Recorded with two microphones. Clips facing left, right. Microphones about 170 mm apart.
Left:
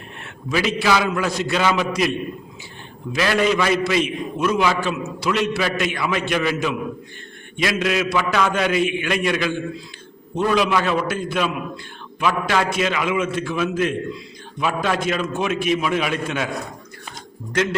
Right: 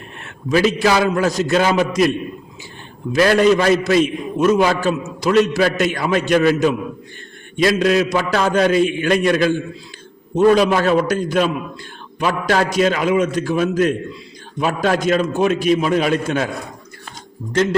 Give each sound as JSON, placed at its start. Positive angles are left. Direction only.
{"t": 0.5, "sound": "a man's voice", "side_deg": -40}
{"t": 17.5, "sound": "a man's voice", "side_deg": -35}